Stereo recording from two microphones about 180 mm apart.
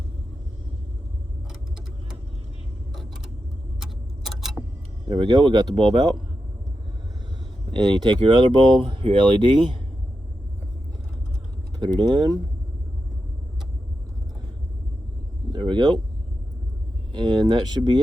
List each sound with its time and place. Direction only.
3.8 s clock: 5° right (ahead or behind)
5.0 s speech: 25° right (ahead or behind)
7.7 s speech: 25° right (ahead or behind)
11.8 s speech: 25° right (ahead or behind)
17.2 s speech: 25° right (ahead or behind)